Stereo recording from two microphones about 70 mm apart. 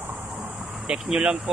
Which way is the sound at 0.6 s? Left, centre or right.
Centre.